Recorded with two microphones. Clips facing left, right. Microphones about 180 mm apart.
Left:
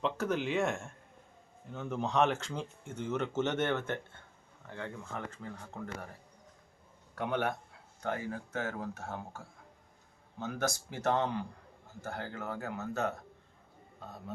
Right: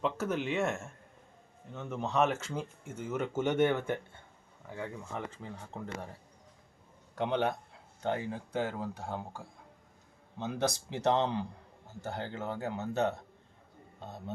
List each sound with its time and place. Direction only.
0.0 s speech: 5° right (ahead or behind)
7.2 s speech: 20° right (ahead or behind)